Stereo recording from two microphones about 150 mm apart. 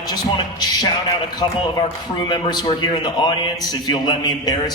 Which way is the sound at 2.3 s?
30° left (ahead or behind).